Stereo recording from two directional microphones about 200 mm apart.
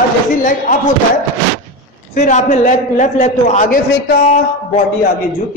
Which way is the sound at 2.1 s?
35° left (ahead or behind).